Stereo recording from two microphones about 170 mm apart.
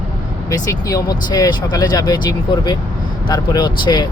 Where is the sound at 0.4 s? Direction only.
20° left (ahead or behind).